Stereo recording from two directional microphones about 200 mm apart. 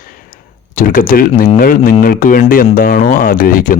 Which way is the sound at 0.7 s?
45° left (ahead or behind).